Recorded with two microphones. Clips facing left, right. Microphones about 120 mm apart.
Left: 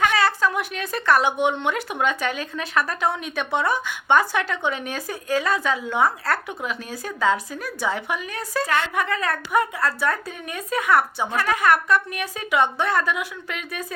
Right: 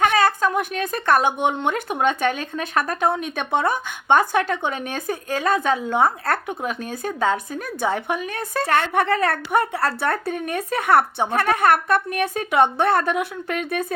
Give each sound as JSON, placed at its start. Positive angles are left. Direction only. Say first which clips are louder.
{"t": 0.0, "sound": "speech", "louder": "right 2 dB", "side_deg": -50}
{"t": 9.3, "sound": "speech", "louder": "right 1 dB", "side_deg": -30}
{"t": 10.1, "sound": "a woman's voice", "louder": "right 3 dB", "side_deg": -65}